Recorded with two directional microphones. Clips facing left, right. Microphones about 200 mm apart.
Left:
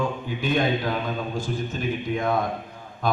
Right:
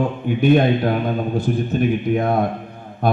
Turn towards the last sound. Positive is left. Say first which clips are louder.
# right 5 dB
turn(degrees=-60)  # may be behind; listen again after turning